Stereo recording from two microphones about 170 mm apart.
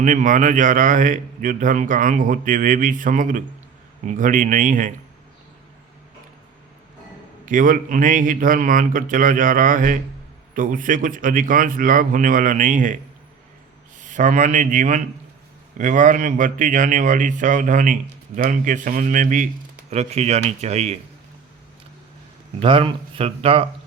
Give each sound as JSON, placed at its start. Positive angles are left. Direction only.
{"t": 0.0, "sound": "a man's voice", "side_deg": -50}
{"t": 7.4, "sound": "a man's voice", "side_deg": -50}
{"t": 14.0, "sound": "a man's voice", "side_deg": -45}
{"t": 22.6, "sound": "speech", "side_deg": -30}